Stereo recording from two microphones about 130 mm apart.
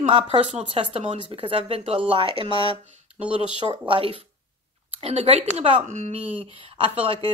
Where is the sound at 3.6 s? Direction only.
45° right (ahead or behind).